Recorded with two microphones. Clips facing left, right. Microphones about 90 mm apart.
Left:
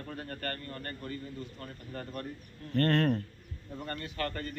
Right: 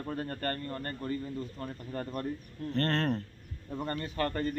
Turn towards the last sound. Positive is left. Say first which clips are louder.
# right 4 dB
turn(degrees=-30)  # may be behind; listen again after turning